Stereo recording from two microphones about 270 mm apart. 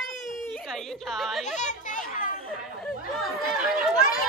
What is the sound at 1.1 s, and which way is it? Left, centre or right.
Speech, centre.